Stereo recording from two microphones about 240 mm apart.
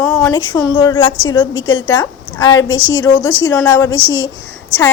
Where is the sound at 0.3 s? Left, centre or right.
Centre.